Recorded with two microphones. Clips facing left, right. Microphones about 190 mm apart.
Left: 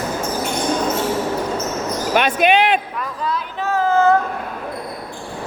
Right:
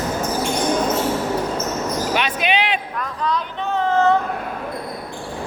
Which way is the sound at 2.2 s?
50° left (ahead or behind).